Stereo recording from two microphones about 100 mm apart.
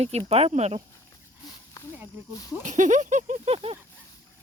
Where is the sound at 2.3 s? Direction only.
35° left (ahead or behind).